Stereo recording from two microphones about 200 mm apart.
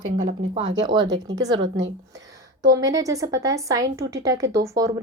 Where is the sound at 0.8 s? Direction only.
20° right (ahead or behind).